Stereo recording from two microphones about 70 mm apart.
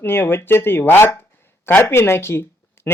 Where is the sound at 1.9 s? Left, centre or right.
Left.